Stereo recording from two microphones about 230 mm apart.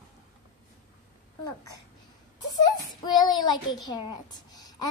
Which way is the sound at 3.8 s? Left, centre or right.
Centre.